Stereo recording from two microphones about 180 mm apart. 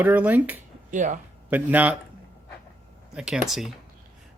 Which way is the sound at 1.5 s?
10° right (ahead or behind).